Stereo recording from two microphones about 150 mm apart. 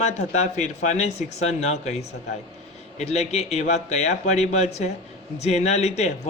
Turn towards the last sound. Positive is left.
turn(degrees=45)  # may be behind; listen again after turning